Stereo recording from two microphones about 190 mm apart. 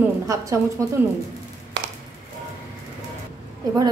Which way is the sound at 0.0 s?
15° right (ahead or behind).